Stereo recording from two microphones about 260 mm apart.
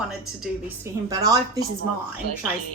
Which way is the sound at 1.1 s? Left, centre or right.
Centre.